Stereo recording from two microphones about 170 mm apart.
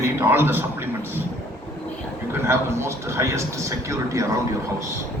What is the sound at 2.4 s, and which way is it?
A man's voice, 15° right (ahead or behind).